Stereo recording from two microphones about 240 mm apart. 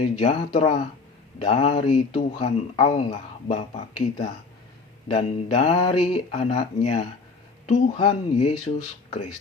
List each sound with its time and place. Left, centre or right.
0.0 s speech: left
5.0 s speech: left